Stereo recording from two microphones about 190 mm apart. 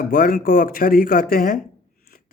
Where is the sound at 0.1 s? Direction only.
45° left (ahead or behind).